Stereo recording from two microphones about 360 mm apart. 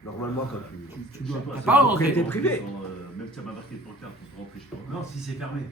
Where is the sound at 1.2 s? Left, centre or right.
Centre.